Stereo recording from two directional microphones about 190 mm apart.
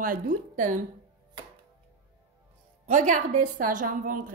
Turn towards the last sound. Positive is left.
turn(degrees=-45)  # may be behind; listen again after turning